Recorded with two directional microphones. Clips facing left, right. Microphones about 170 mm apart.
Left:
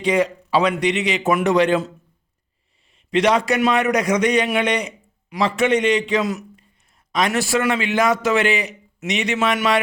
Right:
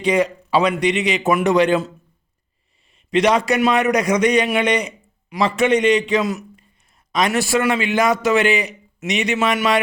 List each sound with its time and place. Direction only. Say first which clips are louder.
0.0 s a man's voice: right 1 dB; 15° right (ahead or behind)
3.1 s a man's voice: right 1 dB; 15° right (ahead or behind)